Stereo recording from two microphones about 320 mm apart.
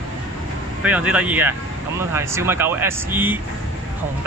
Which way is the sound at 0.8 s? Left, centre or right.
Centre.